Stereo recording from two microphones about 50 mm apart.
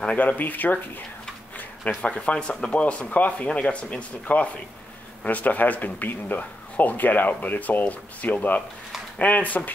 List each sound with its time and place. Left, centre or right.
0.0 s a man's voice: left
1.9 s a man's voice: left